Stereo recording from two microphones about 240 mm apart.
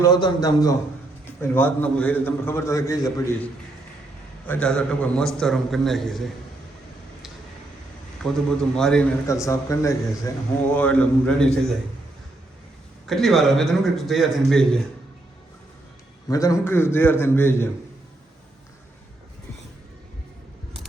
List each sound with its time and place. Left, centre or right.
0.0 s a man's voice: centre
4.4 s a man's voice: centre
8.2 s a man's voice: centre
13.1 s a man's voice: centre
16.3 s a man's voice: centre